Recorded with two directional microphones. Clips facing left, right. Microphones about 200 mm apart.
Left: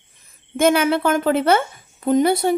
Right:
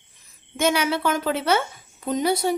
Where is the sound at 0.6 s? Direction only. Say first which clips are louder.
Left 5 dB; 50° left (ahead or behind).